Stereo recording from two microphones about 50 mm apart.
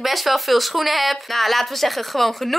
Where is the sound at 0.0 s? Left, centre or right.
Centre.